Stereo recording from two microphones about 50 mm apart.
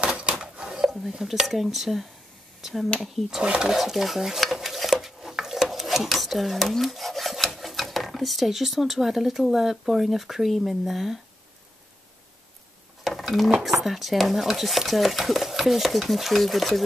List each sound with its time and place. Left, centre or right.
0.2 s a sound: right
0.8 s dishes: centre
1.5 s speech: centre
3.4 s speech: centre
3.7 s speech: centre
13.0 s stir: centre
13.6 s speech: centre